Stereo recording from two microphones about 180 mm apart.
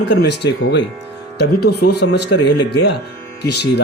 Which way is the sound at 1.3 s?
65° left (ahead or behind).